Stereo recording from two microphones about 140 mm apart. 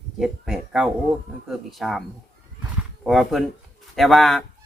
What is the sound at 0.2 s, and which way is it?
A man's voice, 5° right (ahead or behind).